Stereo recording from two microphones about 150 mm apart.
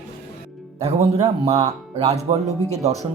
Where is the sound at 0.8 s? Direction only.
45° right (ahead or behind).